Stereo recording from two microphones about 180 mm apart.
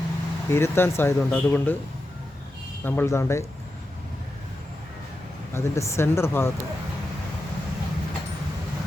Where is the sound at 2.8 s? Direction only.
10° left (ahead or behind).